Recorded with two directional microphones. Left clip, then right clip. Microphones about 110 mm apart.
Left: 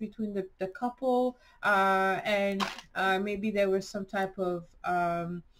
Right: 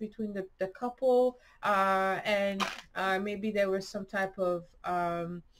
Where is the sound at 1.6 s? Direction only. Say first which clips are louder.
Left 2 dB; 20° right (ahead or behind).